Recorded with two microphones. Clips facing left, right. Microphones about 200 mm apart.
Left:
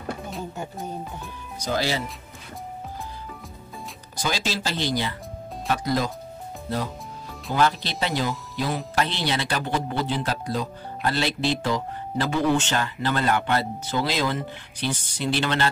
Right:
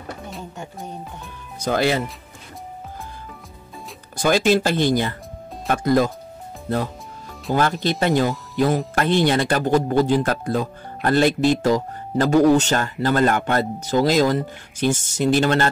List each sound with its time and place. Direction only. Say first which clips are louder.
0.3 s speech: left 2 dB; centre (ahead or behind)
1.6 s speech: right 6 dB; 55° right (ahead or behind)
4.2 s speech: right 11 dB; 55° right (ahead or behind)
7.5 s speech: right 3 dB; 50° right (ahead or behind)